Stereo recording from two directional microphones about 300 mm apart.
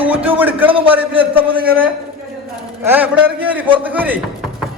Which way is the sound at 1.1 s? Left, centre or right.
Centre.